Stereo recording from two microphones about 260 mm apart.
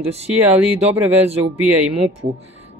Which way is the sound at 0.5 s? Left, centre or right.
Centre.